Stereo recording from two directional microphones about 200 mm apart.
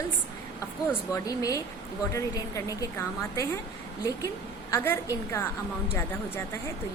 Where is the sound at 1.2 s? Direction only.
15° left (ahead or behind).